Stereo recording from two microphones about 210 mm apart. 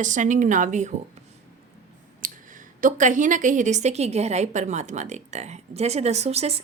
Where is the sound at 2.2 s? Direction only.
40° right (ahead or behind).